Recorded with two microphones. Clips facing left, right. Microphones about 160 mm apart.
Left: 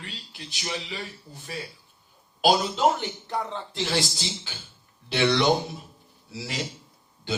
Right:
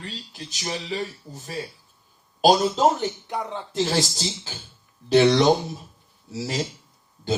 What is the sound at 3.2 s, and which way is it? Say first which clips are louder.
Speech: right 1 dB; 15° right (ahead or behind).